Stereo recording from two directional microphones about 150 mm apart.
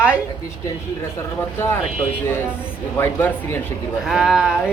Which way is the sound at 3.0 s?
15° left (ahead or behind).